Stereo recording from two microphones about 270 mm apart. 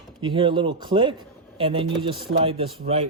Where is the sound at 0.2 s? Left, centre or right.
Centre.